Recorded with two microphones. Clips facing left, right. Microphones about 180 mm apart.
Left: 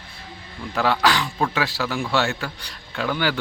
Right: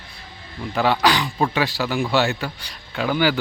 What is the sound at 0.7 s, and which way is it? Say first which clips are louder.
A man's voice: right 2 dB; centre (ahead or behind).